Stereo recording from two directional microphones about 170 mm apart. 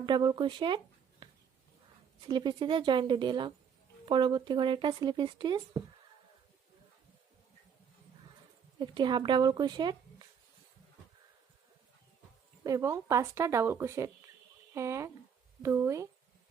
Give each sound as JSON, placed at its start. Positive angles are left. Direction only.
{"t": 0.0, "sound": "speech", "side_deg": -25}
{"t": 1.2, "sound": "a sound", "side_deg": -25}
{"t": 2.2, "sound": "speech", "side_deg": -25}
{"t": 8.8, "sound": "speech", "side_deg": -25}
{"t": 12.6, "sound": "a woman's voice", "side_deg": -20}